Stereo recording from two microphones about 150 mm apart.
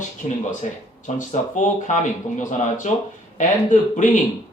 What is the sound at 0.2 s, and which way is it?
Speech, 45° left (ahead or behind).